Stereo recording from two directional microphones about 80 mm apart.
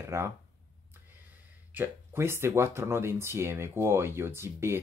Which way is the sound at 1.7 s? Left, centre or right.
Right.